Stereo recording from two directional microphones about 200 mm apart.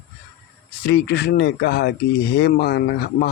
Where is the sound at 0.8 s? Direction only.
55° left (ahead or behind).